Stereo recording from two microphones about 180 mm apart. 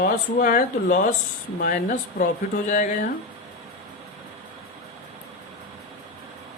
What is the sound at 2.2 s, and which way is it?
Speech, 60° left (ahead or behind).